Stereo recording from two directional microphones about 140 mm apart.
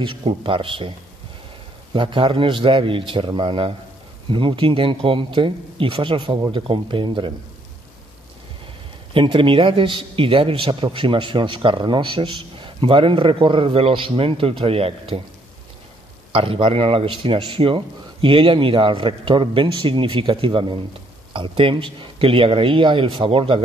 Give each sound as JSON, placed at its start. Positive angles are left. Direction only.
{"t": 0.0, "sound": "speech", "side_deg": -35}
{"t": 2.0, "sound": "speech", "side_deg": -35}
{"t": 9.1, "sound": "speech", "side_deg": -40}
{"t": 16.3, "sound": "speech", "side_deg": -40}